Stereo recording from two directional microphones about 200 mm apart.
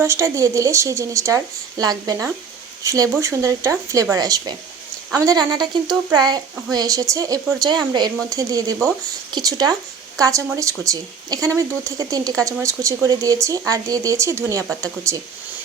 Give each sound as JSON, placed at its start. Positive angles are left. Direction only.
{"t": 0.0, "sound": "speech", "side_deg": -15}